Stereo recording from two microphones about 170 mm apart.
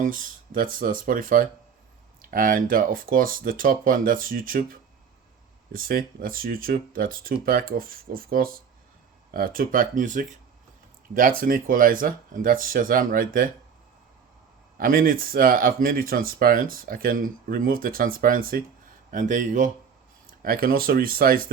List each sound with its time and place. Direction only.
0.0 s speech: 55° right (ahead or behind)
14.8 s speech: 55° right (ahead or behind)
20.4 s speech: 60° right (ahead or behind)